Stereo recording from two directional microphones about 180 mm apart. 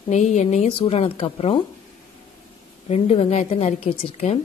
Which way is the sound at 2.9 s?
35° left (ahead or behind).